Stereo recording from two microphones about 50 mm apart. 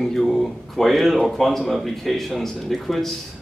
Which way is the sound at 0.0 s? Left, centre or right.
Centre.